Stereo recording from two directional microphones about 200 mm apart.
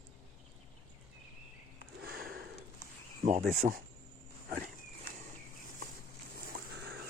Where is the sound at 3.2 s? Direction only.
35° right (ahead or behind).